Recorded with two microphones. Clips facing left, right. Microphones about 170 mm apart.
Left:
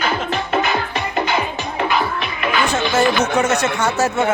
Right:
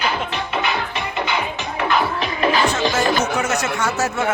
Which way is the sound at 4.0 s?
30° left (ahead or behind).